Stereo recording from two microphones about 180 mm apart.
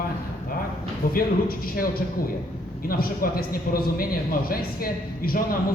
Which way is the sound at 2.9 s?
55° left (ahead or behind).